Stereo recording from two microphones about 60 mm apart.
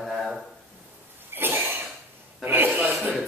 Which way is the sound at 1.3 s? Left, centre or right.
Right.